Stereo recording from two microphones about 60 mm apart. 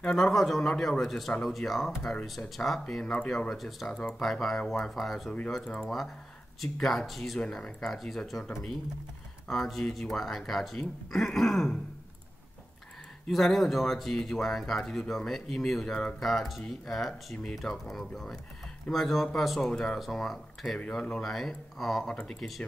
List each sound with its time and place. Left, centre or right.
0.0 s speech: centre
0.3 s speech: centre
1.6 s speech: left
2.2 s speech: centre
2.9 s speech: centre
3.5 s speech: centre
9.5 s speech: centre
13.3 s speech: centre
22.0 s speech: centre